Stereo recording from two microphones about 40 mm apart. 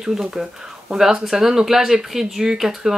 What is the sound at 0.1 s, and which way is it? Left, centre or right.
Speech, centre.